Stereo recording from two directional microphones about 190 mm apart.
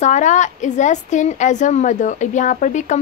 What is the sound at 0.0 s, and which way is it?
A woman's voice, 40° left (ahead or behind).